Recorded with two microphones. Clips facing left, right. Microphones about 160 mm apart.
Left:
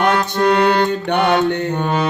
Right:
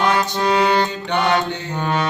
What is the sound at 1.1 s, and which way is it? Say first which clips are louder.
Mantra: left 4 dB; 65° left (ahead or behind).